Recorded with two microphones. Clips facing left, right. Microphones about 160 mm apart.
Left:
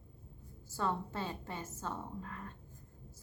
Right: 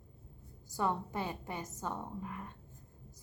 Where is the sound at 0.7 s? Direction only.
15° right (ahead or behind).